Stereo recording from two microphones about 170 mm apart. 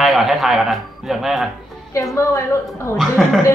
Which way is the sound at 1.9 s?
15° left (ahead or behind).